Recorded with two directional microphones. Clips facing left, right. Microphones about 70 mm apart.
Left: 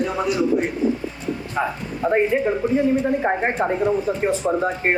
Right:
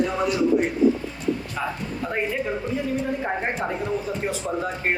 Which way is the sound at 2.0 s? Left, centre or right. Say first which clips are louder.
Left 8 dB; left.